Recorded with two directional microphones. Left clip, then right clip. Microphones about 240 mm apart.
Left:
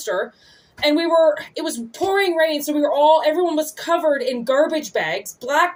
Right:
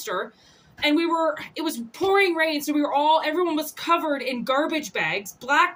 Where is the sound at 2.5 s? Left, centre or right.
Right.